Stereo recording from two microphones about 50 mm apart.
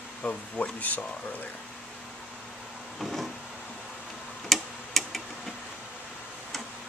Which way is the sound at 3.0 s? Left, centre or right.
Centre.